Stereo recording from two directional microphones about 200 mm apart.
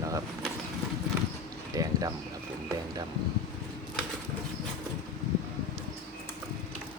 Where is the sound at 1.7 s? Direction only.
20° right (ahead or behind).